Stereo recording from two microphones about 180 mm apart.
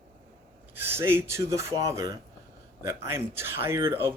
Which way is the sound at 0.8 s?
15° right (ahead or behind).